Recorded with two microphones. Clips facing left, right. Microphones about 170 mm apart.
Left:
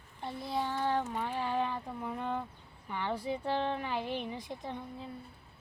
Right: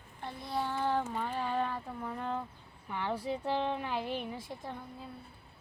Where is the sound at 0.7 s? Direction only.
10° right (ahead or behind).